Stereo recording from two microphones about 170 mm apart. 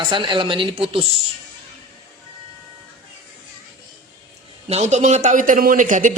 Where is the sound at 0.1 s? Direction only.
30° right (ahead or behind).